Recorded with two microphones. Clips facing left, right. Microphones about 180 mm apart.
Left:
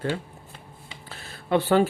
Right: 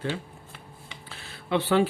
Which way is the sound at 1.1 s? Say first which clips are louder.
Left 3 dB; 45° left (ahead or behind).